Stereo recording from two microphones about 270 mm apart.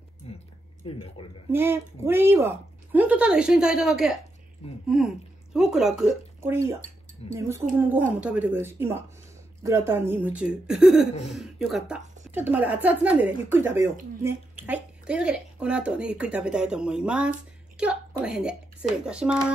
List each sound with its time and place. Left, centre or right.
0.2 s a sound: left
0.8 s speech: centre
1.5 s a woman's voice: centre